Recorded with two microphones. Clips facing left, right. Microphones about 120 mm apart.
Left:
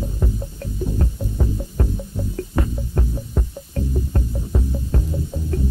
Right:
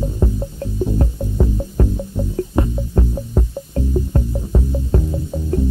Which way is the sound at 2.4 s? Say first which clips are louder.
Right 5 dB; 25° right (ahead or behind).